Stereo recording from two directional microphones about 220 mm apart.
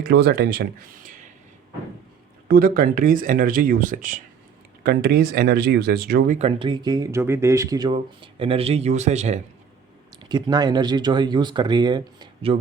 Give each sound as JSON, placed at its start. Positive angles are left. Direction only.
{"t": 0.0, "sound": "speech", "side_deg": -45}
{"t": 2.5, "sound": "speech", "side_deg": -40}
{"t": 6.6, "sound": "speech", "side_deg": -20}
{"t": 10.2, "sound": "speech", "side_deg": -20}